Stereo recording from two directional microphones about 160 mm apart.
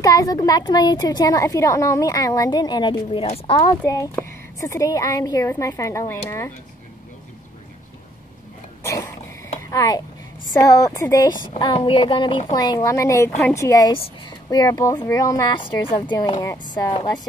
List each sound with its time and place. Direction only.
0.0 s a woman's voice: 20° left (ahead or behind)
9.7 s a woman's voice: 20° left (ahead or behind)